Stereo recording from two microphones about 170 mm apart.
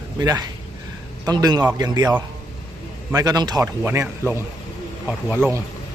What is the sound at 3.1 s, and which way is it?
A man's voice, 20° right (ahead or behind).